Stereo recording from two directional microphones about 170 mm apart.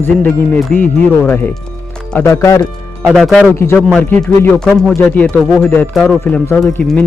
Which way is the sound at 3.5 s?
15° left (ahead or behind).